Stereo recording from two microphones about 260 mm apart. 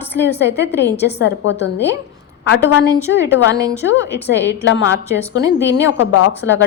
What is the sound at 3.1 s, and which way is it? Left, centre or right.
Speech, left.